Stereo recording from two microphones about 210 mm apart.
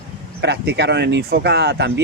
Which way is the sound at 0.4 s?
55° right (ahead or behind).